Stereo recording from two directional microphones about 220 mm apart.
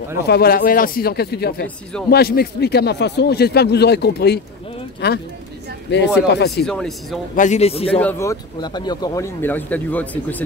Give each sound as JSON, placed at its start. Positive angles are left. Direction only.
{"t": 0.3, "sound": "a man's voice", "side_deg": 45}
{"t": 6.6, "sound": "speech", "side_deg": 0}
{"t": 7.3, "sound": "a man's voice", "side_deg": 30}
{"t": 8.0, "sound": "speech", "side_deg": 10}